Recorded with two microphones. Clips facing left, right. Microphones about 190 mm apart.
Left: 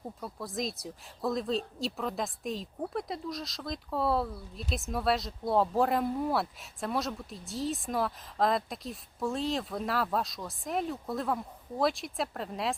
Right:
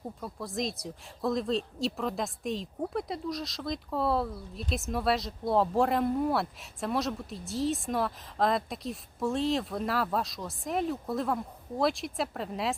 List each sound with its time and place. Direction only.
0.2 s speech: centre (ahead or behind)